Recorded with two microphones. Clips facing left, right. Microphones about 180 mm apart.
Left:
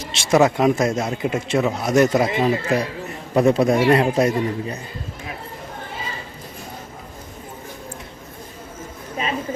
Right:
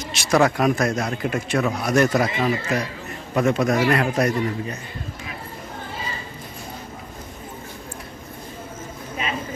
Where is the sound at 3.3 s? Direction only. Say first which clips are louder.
Left 4 dB; 35° left (ahead or behind).